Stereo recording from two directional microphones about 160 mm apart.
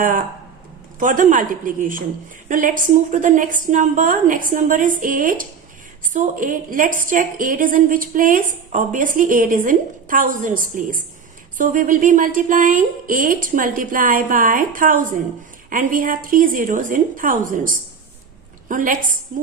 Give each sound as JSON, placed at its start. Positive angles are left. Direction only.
{"t": 0.9, "sound": "a woman's voice", "side_deg": -55}